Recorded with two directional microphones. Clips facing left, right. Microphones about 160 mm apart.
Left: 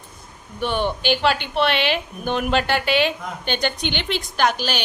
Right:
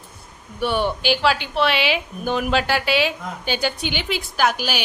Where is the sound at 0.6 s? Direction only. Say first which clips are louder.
Right 1 dB; 10° right (ahead or behind).